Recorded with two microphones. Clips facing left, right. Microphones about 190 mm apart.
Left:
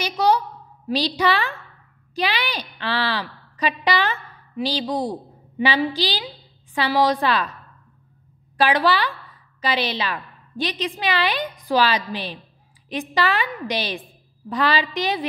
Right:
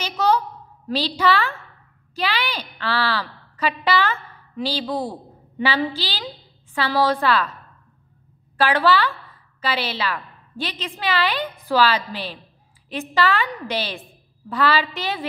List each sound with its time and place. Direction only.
0.0 s a woman's voice: 15° left (ahead or behind)
8.5 s a woman's voice: 15° left (ahead or behind)